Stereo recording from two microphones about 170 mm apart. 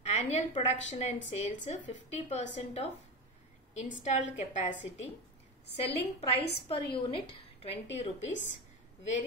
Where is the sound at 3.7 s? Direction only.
45° left (ahead or behind).